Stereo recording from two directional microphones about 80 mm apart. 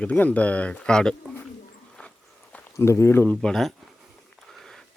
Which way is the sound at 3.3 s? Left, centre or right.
Centre.